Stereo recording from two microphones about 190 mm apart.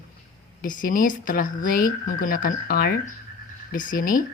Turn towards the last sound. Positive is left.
turn(degrees=45)  # may be behind; listen again after turning